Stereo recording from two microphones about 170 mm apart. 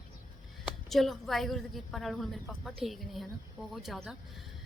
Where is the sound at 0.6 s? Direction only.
Centre (ahead or behind).